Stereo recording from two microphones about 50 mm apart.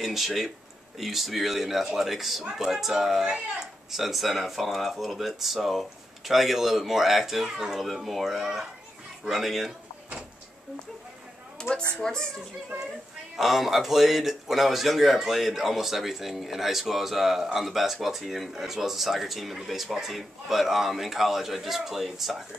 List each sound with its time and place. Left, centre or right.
0.0 s speech: centre
3.3 s speech: centre
3.9 s speech: centre
11.6 s a sound: centre
12.0 s a woman's voice: centre
13.4 s speech: centre